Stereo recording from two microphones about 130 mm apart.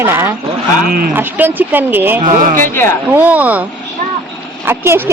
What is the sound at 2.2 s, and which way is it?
Speech, 90° right.